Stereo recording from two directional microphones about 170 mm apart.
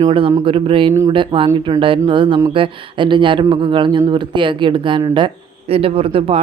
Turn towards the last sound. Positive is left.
turn(degrees=-35)  # may be behind; listen again after turning